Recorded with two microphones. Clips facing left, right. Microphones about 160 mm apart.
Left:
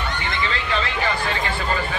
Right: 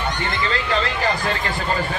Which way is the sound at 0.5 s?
40° right (ahead or behind).